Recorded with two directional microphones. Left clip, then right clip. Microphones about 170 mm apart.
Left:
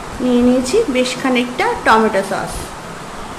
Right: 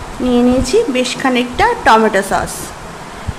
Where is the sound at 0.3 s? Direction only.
30° right (ahead or behind).